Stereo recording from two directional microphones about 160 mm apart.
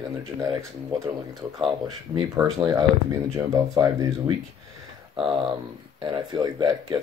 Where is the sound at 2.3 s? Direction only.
20° right (ahead or behind).